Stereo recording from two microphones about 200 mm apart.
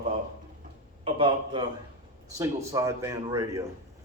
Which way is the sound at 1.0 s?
25° right (ahead or behind).